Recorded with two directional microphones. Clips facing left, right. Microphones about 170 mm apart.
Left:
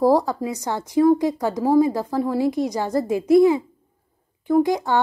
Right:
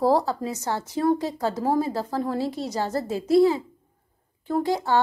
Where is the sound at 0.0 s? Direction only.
15° left (ahead or behind).